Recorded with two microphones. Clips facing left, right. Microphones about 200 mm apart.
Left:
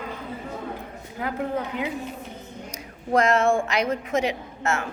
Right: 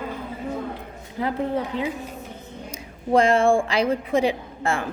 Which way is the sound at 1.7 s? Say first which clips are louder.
Right 2 dB; 35° right (ahead or behind).